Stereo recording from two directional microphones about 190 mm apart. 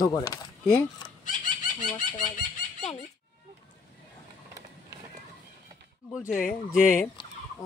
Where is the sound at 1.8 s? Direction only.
45° left (ahead or behind).